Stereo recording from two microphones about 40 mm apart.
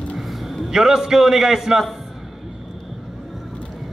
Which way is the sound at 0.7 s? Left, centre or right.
Centre.